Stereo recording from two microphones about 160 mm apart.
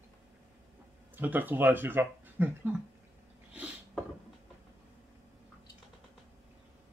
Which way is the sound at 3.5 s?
5° right (ahead or behind).